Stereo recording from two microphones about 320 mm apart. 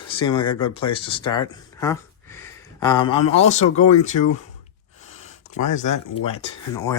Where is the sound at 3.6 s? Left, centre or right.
Left.